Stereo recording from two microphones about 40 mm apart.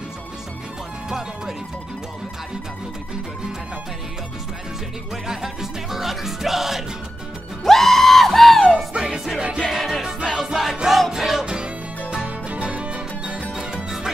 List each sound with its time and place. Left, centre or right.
5.1 s music: centre
7.6 s music: centre
8.9 s music: centre
9.7 s music: centre
11.4 s music: right
13.8 s music: centre